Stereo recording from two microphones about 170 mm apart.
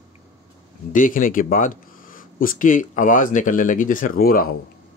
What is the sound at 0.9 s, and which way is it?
Speech, 50° left (ahead or behind).